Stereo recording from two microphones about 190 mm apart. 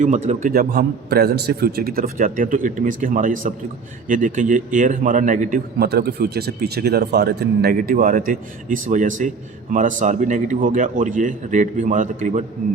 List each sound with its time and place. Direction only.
0.0 s a man's voice: 40° right (ahead or behind)